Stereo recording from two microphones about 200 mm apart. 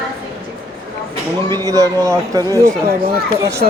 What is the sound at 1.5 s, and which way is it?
Speech, 15° right (ahead or behind).